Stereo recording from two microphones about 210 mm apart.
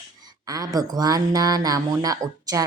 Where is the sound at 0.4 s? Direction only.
15° right (ahead or behind).